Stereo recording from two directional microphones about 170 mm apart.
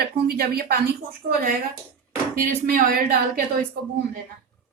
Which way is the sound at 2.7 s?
60° right (ahead or behind).